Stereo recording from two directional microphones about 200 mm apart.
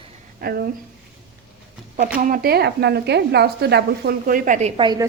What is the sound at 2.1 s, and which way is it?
Speech, 45° right (ahead or behind).